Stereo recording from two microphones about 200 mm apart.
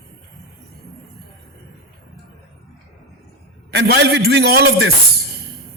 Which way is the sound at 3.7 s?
60° right (ahead or behind).